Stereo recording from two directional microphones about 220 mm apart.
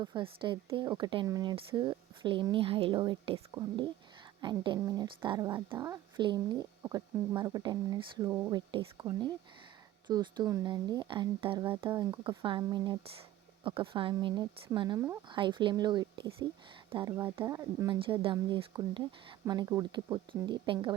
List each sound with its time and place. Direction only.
0.0 s speech: 20° right (ahead or behind)